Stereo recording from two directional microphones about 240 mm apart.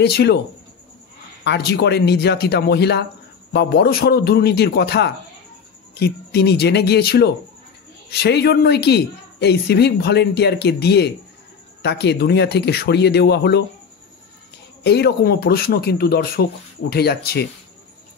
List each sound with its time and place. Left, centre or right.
0.0 s a woman's voice: left
1.4 s a woman's voice: left
14.8 s speech: left